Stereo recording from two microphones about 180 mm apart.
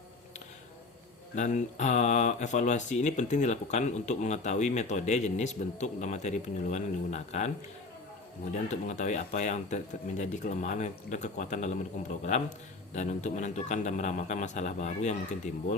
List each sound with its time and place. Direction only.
1.4 s speech: 40° left (ahead or behind)
8.7 s speech: 40° left (ahead or behind)